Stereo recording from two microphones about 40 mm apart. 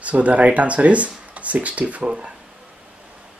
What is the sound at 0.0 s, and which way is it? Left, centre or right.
Speech, right.